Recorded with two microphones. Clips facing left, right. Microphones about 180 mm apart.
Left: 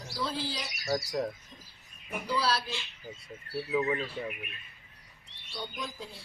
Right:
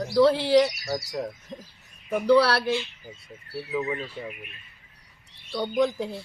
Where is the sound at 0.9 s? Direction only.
Centre (ahead or behind).